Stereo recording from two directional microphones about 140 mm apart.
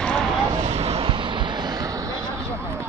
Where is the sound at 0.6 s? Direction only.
50° right (ahead or behind).